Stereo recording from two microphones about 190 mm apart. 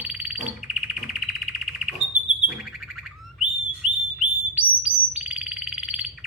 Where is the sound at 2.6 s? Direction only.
Centre (ahead or behind).